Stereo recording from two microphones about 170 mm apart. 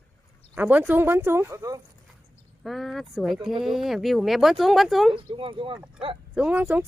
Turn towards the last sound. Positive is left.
turn(degrees=-10)  # may be behind; listen again after turning